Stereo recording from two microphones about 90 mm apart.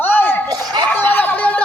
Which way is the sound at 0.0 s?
25° left (ahead or behind).